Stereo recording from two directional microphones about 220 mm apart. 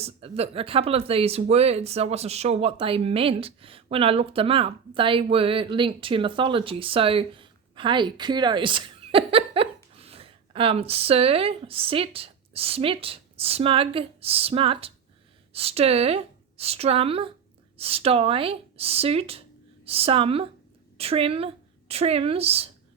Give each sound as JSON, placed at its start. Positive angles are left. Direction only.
{"t": 0.0, "sound": "a woman's voice", "side_deg": -25}